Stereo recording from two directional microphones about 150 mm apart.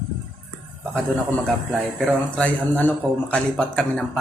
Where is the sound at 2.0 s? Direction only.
10° left (ahead or behind).